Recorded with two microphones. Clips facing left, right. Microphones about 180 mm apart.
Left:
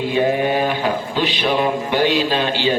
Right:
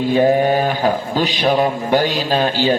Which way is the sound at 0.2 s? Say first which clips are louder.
Right 3 dB; 40° right (ahead or behind).